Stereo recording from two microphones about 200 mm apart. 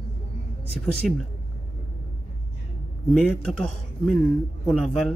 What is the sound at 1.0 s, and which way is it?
Speech, centre (ahead or behind).